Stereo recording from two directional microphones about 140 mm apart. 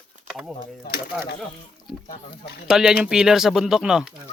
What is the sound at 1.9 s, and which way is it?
Speech, 5° right (ahead or behind).